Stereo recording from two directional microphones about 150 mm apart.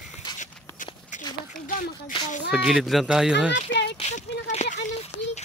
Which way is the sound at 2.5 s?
Centre (ahead or behind).